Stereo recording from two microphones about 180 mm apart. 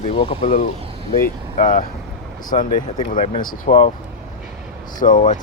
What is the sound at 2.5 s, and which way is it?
Speech, 35° left (ahead or behind).